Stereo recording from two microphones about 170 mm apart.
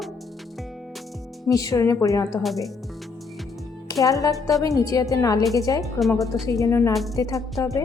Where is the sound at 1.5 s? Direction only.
20° left (ahead or behind).